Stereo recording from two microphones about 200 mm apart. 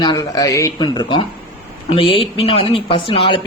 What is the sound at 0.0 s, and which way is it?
Speech, 20° left (ahead or behind).